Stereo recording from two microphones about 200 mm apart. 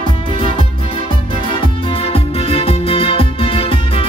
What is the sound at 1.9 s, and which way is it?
Music, 30° left (ahead or behind).